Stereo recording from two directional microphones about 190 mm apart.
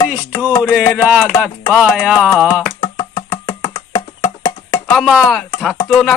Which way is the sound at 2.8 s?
20° left (ahead or behind).